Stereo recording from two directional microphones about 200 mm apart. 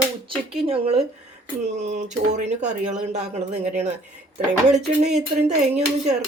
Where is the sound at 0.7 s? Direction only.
30° right (ahead or behind).